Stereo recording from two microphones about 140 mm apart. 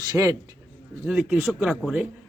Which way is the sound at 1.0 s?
Centre (ahead or behind).